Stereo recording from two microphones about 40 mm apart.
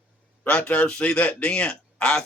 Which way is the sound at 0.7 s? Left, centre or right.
Left.